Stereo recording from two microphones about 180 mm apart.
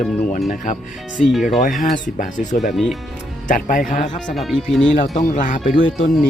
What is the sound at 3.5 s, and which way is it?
Speech, 50° left (ahead or behind).